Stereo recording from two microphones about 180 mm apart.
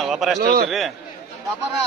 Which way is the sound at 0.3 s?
55° right (ahead or behind).